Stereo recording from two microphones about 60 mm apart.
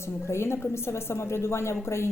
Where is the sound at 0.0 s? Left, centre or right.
Left.